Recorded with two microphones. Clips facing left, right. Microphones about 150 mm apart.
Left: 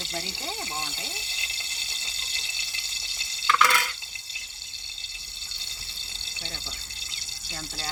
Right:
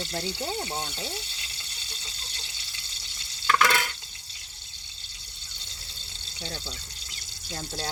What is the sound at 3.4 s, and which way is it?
Stir, 45° right (ahead or behind).